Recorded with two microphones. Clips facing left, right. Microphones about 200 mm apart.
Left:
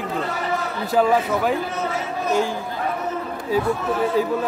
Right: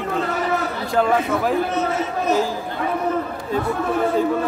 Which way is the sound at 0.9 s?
Centre (ahead or behind).